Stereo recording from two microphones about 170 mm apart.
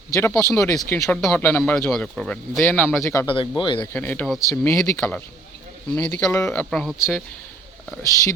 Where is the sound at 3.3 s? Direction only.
30° left (ahead or behind).